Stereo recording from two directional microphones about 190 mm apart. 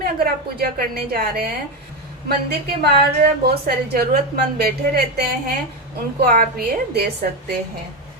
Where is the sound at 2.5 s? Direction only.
60° right (ahead or behind).